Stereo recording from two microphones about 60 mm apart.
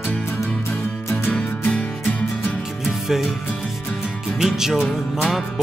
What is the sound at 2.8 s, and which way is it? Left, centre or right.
Music, centre.